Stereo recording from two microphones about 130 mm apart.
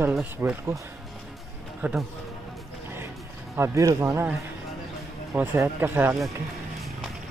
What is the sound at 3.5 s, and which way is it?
A man's voice, 20° right (ahead or behind).